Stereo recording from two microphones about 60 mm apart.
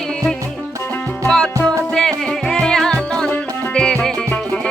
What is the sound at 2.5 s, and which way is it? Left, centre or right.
Music, centre.